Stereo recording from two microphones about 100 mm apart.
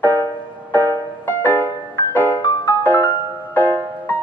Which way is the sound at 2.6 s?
20° left (ahead or behind).